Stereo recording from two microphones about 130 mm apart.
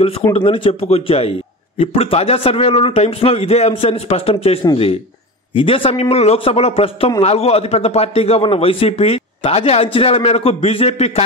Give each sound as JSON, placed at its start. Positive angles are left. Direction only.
{"t": 0.0, "sound": "a man's voice", "side_deg": 45}